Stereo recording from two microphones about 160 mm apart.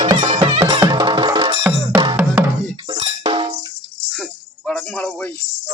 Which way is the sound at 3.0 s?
40° right (ahead or behind).